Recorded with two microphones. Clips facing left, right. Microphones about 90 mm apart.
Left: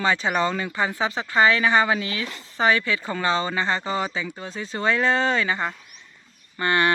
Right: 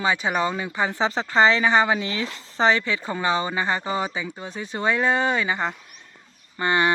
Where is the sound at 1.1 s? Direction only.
30° right (ahead or behind).